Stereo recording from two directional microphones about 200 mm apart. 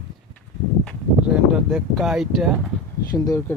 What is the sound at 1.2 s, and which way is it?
Speech, 5° right (ahead or behind).